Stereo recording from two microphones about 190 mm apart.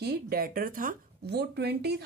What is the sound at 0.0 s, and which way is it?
A woman's voice, 50° right (ahead or behind).